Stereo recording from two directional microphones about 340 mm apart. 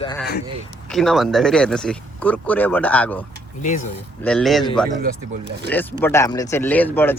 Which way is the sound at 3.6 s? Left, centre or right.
Left.